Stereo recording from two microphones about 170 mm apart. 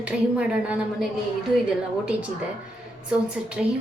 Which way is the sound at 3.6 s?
5° right (ahead or behind).